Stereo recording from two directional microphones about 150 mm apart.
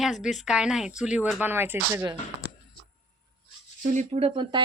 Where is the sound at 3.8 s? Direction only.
55° right (ahead or behind); by 4.6 s 35° right (ahead or behind).